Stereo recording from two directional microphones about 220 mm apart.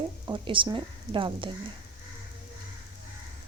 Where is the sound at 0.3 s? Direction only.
20° right (ahead or behind).